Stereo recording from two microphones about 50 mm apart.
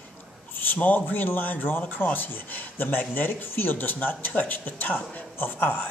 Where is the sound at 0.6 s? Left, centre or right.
Left.